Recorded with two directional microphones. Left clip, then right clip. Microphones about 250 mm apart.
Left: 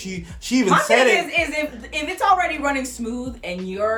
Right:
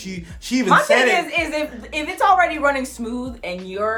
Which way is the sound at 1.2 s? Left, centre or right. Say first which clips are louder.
Even; centre.